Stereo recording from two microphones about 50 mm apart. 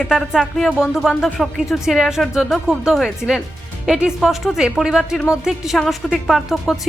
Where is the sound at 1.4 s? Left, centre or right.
Centre.